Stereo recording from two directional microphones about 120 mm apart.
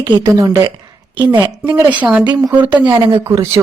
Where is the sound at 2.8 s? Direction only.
35° right (ahead or behind).